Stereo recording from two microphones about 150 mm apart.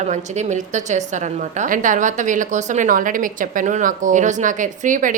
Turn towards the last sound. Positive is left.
turn(degrees=-60)  # may be behind; listen again after turning